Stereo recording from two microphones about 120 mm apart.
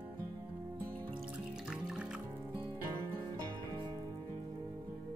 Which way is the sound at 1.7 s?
5° right (ahead or behind).